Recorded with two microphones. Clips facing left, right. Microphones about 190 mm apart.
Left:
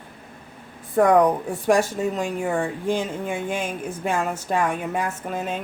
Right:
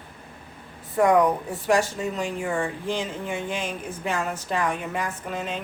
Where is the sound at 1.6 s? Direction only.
50° left (ahead or behind).